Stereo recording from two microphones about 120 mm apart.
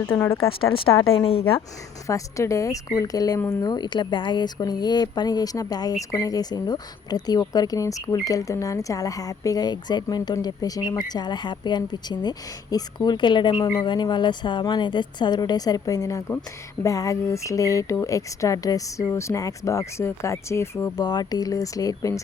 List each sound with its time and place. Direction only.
0.1 s speech: 20° left (ahead or behind)
0.3 s speech: 50° left (ahead or behind)
2.0 s speech: 25° left (ahead or behind)
20.9 s speech: 35° left (ahead or behind)